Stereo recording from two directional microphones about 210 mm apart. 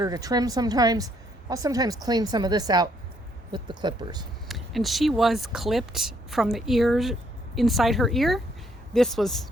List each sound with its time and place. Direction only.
0.0 s speech: 15° right (ahead or behind)
4.4 s speech: centre (ahead or behind)